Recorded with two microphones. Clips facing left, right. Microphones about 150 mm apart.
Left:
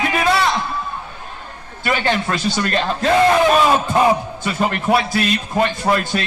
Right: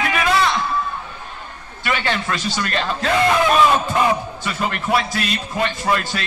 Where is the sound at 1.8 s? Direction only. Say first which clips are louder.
Left 3 dB; 40° left (ahead or behind).